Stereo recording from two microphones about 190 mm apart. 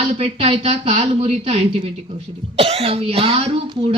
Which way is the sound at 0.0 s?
30° right (ahead or behind).